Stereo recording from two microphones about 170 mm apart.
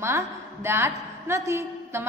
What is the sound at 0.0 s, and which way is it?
A woman's voice, 15° right (ahead or behind).